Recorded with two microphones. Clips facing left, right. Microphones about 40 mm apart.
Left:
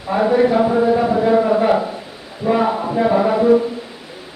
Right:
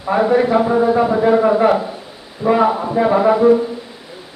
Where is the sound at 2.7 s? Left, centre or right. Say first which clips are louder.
Right 1 dB; centre.